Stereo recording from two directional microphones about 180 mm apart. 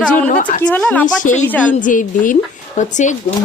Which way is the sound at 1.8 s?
45° left (ahead or behind).